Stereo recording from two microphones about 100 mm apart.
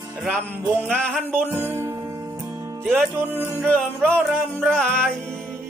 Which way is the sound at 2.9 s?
20° right (ahead or behind).